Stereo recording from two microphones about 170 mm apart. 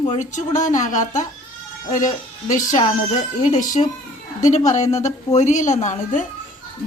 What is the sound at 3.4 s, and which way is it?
A woman's voice, 50° left (ahead or behind).